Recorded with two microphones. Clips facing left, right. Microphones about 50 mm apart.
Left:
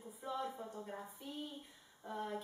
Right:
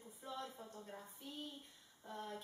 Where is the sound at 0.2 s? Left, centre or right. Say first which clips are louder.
Left 6 dB; centre.